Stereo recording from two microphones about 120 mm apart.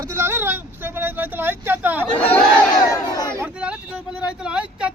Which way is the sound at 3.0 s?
30° left (ahead or behind).